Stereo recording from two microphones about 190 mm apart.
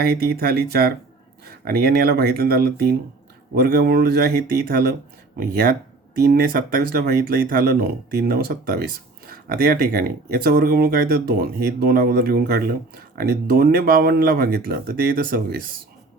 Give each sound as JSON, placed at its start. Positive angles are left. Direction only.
{"t": 0.0, "sound": "speech", "side_deg": -55}